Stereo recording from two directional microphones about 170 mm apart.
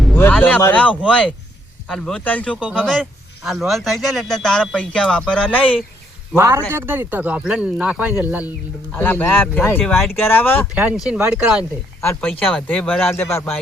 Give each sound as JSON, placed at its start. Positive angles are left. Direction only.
{"t": 0.1, "sound": "speech", "side_deg": 10}
{"t": 6.3, "sound": "speech", "side_deg": -15}
{"t": 9.0, "sound": "speech", "side_deg": 10}
{"t": 10.8, "sound": "speech", "side_deg": -5}
{"t": 12.0, "sound": "speech", "side_deg": 10}